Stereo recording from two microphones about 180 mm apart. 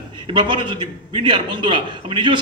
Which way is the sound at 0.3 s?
25° right (ahead or behind).